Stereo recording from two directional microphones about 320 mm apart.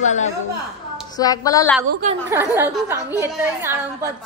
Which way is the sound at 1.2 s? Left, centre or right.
Centre.